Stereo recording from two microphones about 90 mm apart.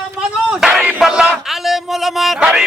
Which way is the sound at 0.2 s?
5° right (ahead or behind).